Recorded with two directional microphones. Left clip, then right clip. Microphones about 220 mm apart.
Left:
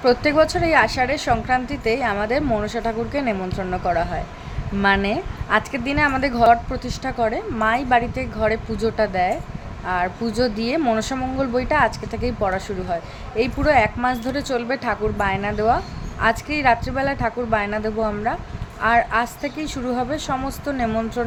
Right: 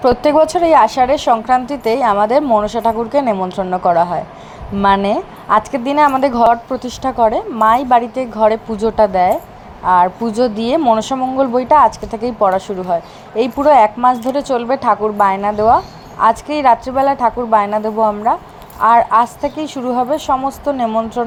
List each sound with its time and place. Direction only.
0.0 s a woman's voice: 20° right (ahead or behind)